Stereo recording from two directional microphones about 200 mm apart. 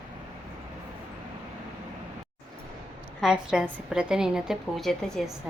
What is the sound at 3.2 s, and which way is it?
A woman's voice, 5° right (ahead or behind).